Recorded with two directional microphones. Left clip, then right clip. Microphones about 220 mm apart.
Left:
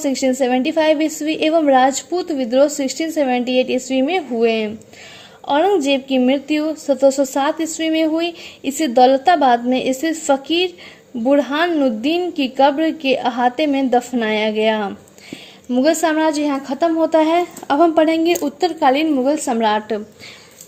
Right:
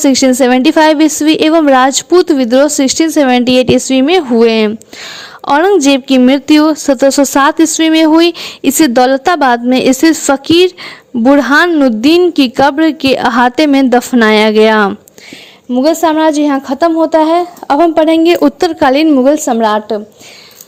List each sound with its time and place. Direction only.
0.0 s speech: 45° right (ahead or behind)
15.7 s a woman's voice: 30° right (ahead or behind)